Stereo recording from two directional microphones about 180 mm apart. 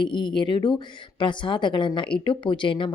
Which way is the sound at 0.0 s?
25° left (ahead or behind).